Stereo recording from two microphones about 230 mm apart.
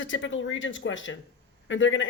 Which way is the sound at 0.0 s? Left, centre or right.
Left.